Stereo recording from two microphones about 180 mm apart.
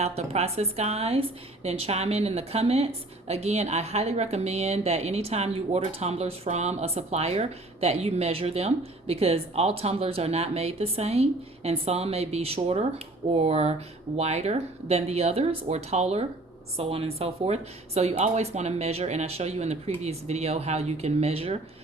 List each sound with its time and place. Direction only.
0.0 s a woman's voice: 35° right (ahead or behind)